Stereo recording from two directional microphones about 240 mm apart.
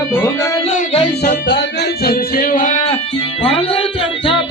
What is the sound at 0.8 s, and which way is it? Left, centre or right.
Music, left.